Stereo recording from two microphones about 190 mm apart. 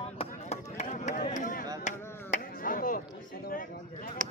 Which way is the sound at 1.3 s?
45° left (ahead or behind).